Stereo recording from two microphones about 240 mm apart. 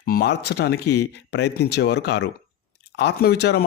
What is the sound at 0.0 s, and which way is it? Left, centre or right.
Speech, left.